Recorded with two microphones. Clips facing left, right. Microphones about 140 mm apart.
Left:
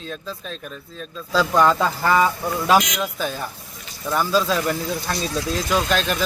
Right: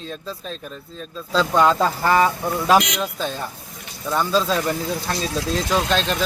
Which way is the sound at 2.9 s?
25° right (ahead or behind).